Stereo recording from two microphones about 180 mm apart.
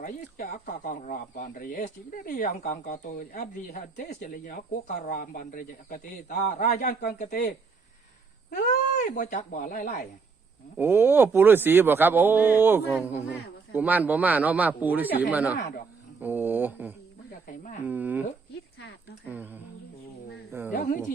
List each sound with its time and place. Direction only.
0.0 s speech: 50° left (ahead or behind)
8.6 s speech: 45° left (ahead or behind)
10.8 s speech: 10° right (ahead or behind)
19.3 s speech: 10° right (ahead or behind)